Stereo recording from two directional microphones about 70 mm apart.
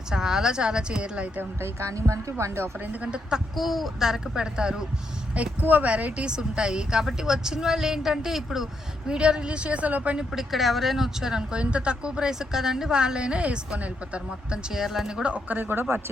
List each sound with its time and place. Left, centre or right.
0.1 s speech: centre
1.4 s speech: right
2.8 s speech: right
3.5 s speech: centre
5.3 s a woman's voice: right
10.3 s speech: centre; by 16.0 s right